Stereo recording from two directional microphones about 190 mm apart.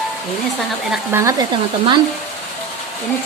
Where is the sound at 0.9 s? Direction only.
15° right (ahead or behind).